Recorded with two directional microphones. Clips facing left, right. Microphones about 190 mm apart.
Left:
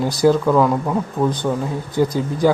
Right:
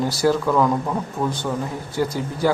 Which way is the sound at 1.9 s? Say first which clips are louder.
Left 5 dB; 15° left (ahead or behind).